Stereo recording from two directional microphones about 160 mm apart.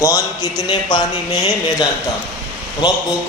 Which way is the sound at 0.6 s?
30° left (ahead or behind).